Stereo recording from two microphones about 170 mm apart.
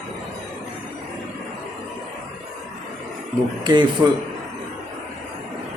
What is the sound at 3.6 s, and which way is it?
Speech, 25° right (ahead or behind).